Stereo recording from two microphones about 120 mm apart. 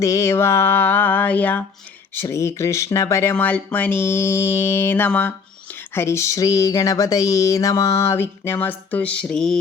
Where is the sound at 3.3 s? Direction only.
15° left (ahead or behind).